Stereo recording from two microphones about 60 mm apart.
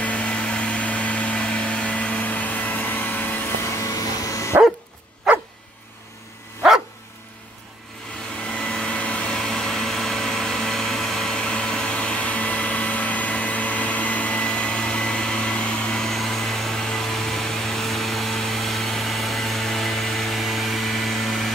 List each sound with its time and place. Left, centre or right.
0.0 s vehicle: centre
3.8 s vacuum cleaner: left
5.3 s dog: centre
8.7 s vehicle: left; by 21.5 s centre